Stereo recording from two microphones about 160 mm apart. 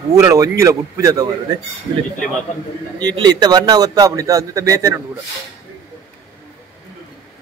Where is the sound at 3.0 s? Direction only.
25° right (ahead or behind).